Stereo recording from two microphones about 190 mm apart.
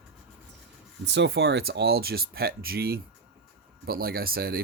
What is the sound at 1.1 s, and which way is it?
Speech, 65° right (ahead or behind).